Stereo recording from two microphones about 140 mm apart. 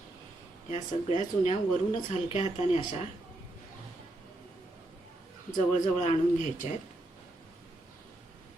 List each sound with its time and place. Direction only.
0.7 s speech: 55° left (ahead or behind)
5.5 s a man's voice: 60° left (ahead or behind)